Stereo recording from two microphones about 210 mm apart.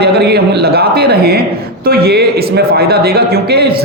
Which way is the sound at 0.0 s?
50° right (ahead or behind).